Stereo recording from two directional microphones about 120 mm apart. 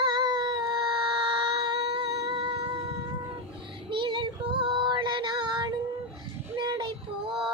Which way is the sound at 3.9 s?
45° right (ahead or behind).